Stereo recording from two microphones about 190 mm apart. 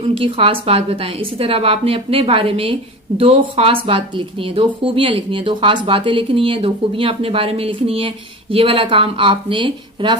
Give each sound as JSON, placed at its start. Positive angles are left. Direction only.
{"t": 0.2, "sound": "a woman's voice", "side_deg": -30}